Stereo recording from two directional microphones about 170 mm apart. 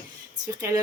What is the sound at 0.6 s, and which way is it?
Speech, 15° right (ahead or behind).